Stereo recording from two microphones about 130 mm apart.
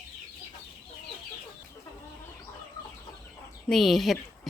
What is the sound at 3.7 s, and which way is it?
Speech, centre (ahead or behind).